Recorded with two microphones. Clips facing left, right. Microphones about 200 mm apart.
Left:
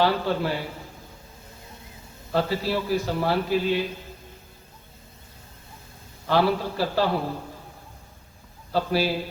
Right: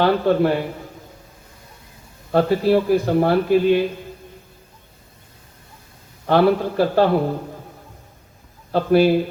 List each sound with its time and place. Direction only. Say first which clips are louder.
0.0 s a man's voice: right 7 dB; 55° right (ahead or behind)
2.3 s a man's voice: right 9 dB; 55° right (ahead or behind)
6.2 s a man's voice: right 6 dB; 55° right (ahead or behind)
8.7 s speech: right 9 dB; 55° right (ahead or behind)